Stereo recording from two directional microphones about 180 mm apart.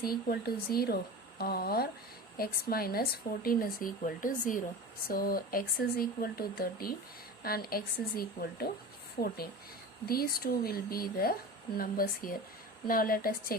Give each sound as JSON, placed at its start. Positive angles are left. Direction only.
{"t": 0.0, "sound": "speech", "side_deg": 55}